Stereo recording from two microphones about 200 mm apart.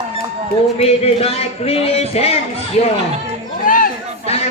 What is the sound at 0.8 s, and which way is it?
Speech, 30° left (ahead or behind).